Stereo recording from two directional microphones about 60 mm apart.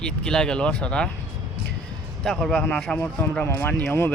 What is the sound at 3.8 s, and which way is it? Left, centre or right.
Speech, left.